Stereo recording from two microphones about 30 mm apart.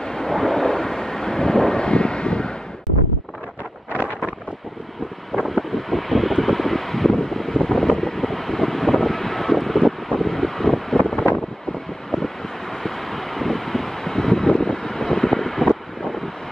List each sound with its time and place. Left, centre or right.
0.0 s a sound: left
0.3 s wind noise: centre; by 2.5 s left
5.3 s wind: centre
7.2 s wind noise: centre
8.0 s vehicle: centre
12.8 s vehicle: centre